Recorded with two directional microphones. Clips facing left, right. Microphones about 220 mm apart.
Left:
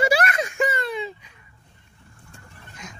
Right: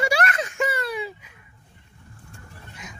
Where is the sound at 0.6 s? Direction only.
5° right (ahead or behind).